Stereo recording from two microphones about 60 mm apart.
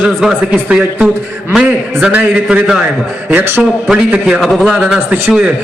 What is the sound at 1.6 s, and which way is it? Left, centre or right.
A man's voice, centre.